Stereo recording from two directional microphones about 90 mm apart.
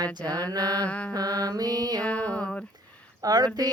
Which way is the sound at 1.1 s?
45° right (ahead or behind).